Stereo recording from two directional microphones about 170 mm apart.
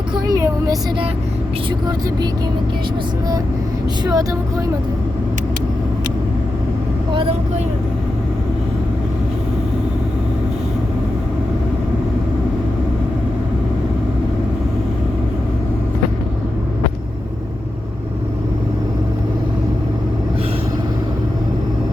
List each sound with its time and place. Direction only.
0.3 s speech: 20° right (ahead or behind)
4.0 s speech: 20° right (ahead or behind)
7.1 s speech: 30° right (ahead or behind)